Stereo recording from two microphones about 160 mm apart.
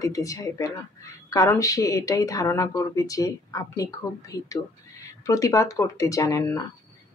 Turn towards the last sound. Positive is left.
turn(degrees=20)  # may be behind; listen again after turning